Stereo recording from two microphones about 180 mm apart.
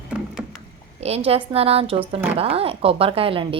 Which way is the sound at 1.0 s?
35° right (ahead or behind).